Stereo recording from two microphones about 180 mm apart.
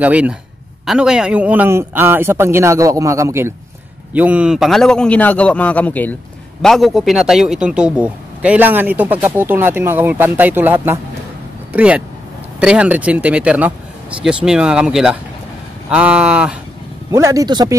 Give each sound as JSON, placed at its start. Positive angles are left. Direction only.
{"t": 0.0, "sound": "a man's voice", "side_deg": -5}
{"t": 17.1, "sound": "speech", "side_deg": -15}